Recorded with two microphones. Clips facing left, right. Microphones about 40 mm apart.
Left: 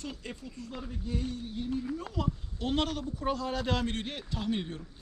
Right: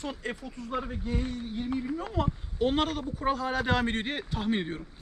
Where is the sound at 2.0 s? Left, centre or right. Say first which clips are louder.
Right 4 dB; right.